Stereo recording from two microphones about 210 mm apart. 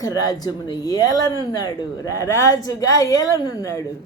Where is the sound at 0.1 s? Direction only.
15° left (ahead or behind).